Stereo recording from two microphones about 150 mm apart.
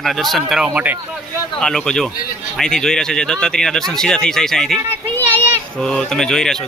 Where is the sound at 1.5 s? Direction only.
5° left (ahead or behind).